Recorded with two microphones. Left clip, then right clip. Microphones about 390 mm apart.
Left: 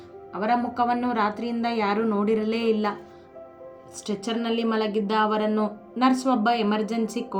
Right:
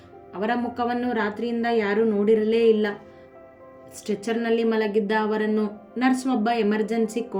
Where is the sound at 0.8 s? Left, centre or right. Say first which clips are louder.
Left 2 dB; left.